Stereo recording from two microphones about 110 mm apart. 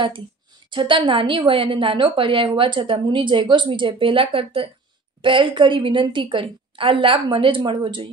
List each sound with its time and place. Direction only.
0.7 s a woman's voice: 45° right (ahead or behind)